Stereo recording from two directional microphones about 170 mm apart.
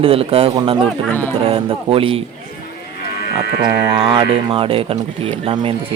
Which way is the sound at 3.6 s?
30° right (ahead or behind).